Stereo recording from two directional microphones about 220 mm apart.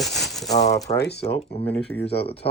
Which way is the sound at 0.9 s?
50° left (ahead or behind).